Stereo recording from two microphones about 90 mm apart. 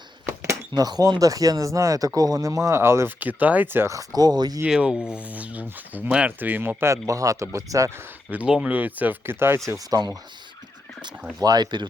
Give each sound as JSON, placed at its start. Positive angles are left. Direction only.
{"t": 0.7, "sound": "speech", "side_deg": -45}
{"t": 3.2, "sound": "speech", "side_deg": -20}
{"t": 3.9, "sound": "speech", "side_deg": -45}
{"t": 4.6, "sound": "speech", "side_deg": -10}
{"t": 8.4, "sound": "speech", "side_deg": -10}
{"t": 9.9, "sound": "speech", "side_deg": -45}
{"t": 11.3, "sound": "speech", "side_deg": -50}